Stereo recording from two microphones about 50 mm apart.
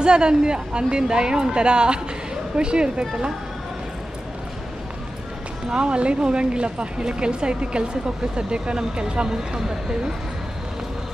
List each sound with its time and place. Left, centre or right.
0.0 s a woman's voice: centre
5.7 s speech: centre